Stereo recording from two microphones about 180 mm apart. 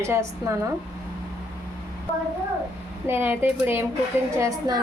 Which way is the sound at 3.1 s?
10° right (ahead or behind).